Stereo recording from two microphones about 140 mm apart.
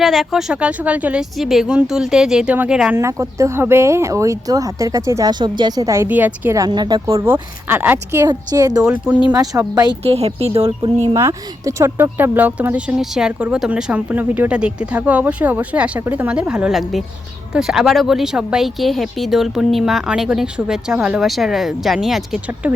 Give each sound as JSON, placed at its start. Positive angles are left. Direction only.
{"t": 0.0, "sound": "speech", "side_deg": 0}
{"t": 3.0, "sound": "speech", "side_deg": -20}
{"t": 6.6, "sound": "a woman's voice", "side_deg": -30}
{"t": 7.7, "sound": "speech", "side_deg": -15}
{"t": 8.8, "sound": "speech", "side_deg": -5}
{"t": 9.3, "sound": "speech", "side_deg": -25}
{"t": 10.0, "sound": "speech", "side_deg": -45}
{"t": 11.1, "sound": "speech", "side_deg": -25}